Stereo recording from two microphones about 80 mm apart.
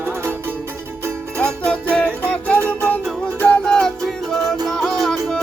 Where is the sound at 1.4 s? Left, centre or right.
Centre.